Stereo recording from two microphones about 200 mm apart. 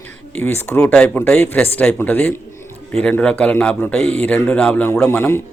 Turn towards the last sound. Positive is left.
turn(degrees=10)  # may be behind; listen again after turning